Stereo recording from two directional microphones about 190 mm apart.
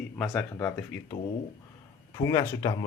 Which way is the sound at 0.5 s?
10° left (ahead or behind).